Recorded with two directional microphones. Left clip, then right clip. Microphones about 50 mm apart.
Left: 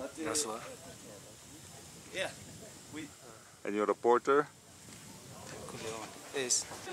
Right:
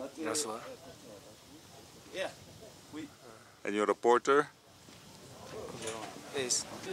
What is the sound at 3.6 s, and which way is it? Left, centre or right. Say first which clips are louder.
Speech: right 1 dB; centre.